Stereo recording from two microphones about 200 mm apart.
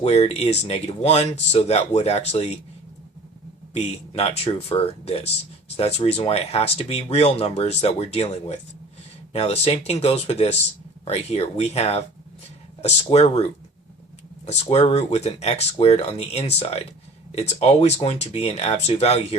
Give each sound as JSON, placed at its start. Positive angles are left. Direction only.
{"t": 0.0, "sound": "speech", "side_deg": 30}
{"t": 3.8, "sound": "speech", "side_deg": 30}
{"t": 14.4, "sound": "speech", "side_deg": 30}